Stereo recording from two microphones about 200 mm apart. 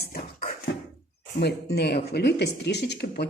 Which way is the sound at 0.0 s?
45° left (ahead or behind).